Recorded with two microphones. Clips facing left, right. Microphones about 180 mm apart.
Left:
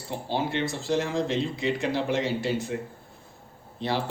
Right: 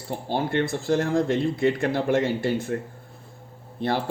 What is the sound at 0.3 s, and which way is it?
Speech, 55° right (ahead or behind).